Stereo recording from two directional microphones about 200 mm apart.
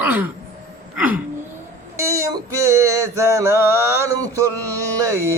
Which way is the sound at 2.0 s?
15° right (ahead or behind).